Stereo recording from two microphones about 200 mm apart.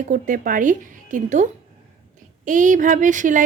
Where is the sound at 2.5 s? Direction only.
40° right (ahead or behind).